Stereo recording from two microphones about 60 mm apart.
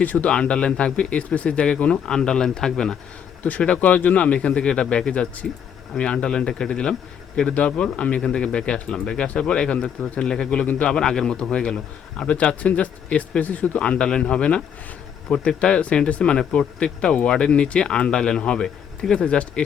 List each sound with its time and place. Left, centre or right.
0.0 s speech: left
3.6 s speech: left